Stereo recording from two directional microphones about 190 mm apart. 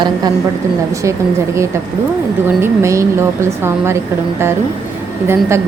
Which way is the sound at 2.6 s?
15° right (ahead or behind).